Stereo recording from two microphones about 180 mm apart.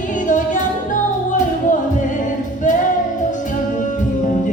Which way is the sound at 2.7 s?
45° left (ahead or behind).